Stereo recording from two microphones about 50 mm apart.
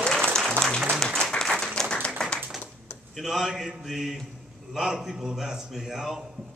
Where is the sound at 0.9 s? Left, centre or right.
Centre.